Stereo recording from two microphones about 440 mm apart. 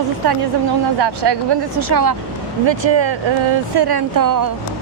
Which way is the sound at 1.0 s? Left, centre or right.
Right.